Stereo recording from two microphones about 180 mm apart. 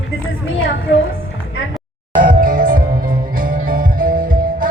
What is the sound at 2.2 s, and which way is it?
Music, 50° right (ahead or behind).